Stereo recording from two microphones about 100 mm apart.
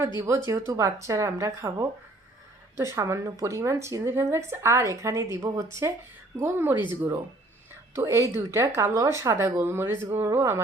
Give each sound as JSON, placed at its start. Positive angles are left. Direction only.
{"t": 0.2, "sound": "a woman's voice", "side_deg": -30}
{"t": 7.9, "sound": "a woman's voice", "side_deg": -30}